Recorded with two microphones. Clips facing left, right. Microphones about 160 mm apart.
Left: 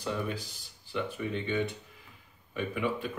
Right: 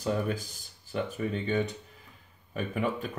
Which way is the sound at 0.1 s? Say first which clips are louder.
Right 4 dB; 45° right (ahead or behind).